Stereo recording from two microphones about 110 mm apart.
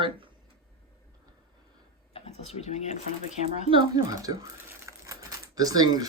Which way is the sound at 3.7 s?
50° right (ahead or behind).